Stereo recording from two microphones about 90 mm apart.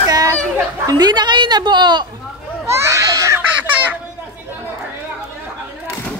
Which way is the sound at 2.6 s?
30° right (ahead or behind).